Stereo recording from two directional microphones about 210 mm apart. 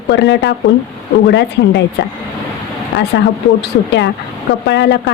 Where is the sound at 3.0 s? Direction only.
55° left (ahead or behind).